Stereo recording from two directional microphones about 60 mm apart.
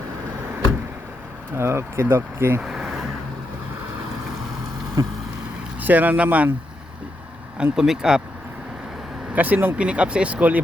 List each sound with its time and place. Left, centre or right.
1.5 s speech: right
2.6 s vehicle: centre
5.0 s vehicle: right
5.8 s speech: right
7.6 s speech: centre
9.3 s speech: right
9.7 s speech: centre